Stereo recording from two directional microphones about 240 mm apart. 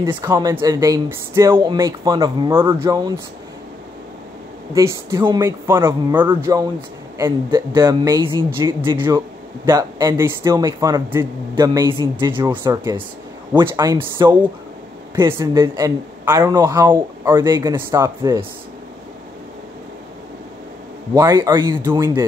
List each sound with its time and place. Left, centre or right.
0.0 s speech: centre
4.7 s speech: centre
13.6 s speech: centre
21.1 s speech: centre